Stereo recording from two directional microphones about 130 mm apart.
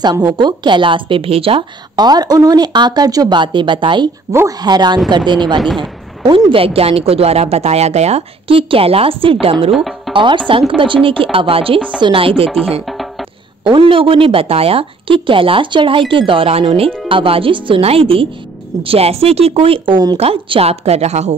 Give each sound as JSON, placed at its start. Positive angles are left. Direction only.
{"t": 0.4, "sound": "a woman's voice", "side_deg": -35}
{"t": 2.0, "sound": "a woman's voice", "side_deg": -30}
{"t": 4.3, "sound": "speech", "side_deg": -20}
{"t": 4.6, "sound": "a woman's voice", "side_deg": -35}
{"t": 9.8, "sound": "speech", "side_deg": 0}
{"t": 10.1, "sound": "a woman's voice", "side_deg": -40}
{"t": 12.8, "sound": "music", "side_deg": 0}
{"t": 13.7, "sound": "a woman's voice", "side_deg": -40}